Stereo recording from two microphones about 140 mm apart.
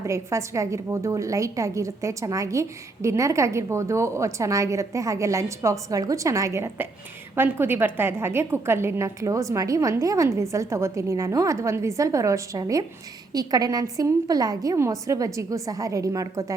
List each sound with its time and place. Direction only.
0.0 s a woman's voice: 20° right (ahead or behind)